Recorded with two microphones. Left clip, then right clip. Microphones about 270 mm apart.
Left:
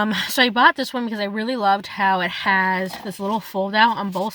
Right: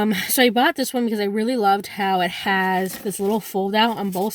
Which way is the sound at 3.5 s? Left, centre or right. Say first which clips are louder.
Left 2 dB; left.